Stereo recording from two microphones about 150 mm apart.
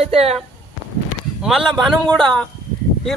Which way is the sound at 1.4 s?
Centre (ahead or behind).